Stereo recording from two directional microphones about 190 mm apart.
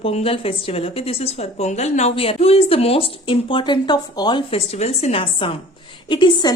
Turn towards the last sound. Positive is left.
turn(degrees=25)  # may be behind; listen again after turning